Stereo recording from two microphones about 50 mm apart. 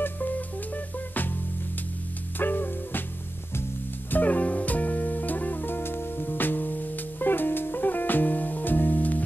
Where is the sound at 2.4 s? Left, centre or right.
Left.